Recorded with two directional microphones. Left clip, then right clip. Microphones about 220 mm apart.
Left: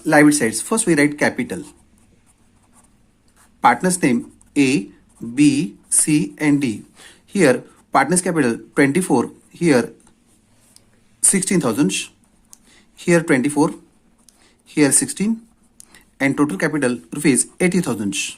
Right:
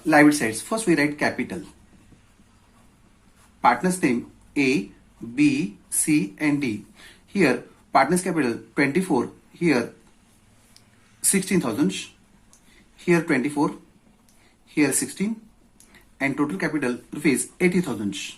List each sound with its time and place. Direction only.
0.0 s speech: 40° left (ahead or behind)
3.6 s speech: 45° left (ahead or behind)
13.1 s speech: 50° left (ahead or behind)